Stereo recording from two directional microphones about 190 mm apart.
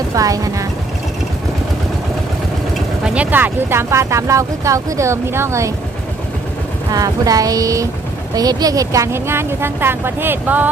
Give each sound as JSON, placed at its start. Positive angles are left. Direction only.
{"t": 0.1, "sound": "speech", "side_deg": -20}
{"t": 3.0, "sound": "speech", "side_deg": -5}
{"t": 6.9, "sound": "speech", "side_deg": -20}